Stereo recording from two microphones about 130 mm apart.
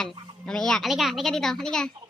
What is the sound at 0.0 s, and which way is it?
Speech, 5° left (ahead or behind).